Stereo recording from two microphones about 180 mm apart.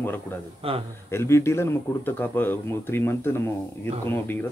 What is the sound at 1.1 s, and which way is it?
Speech, 15° left (ahead or behind).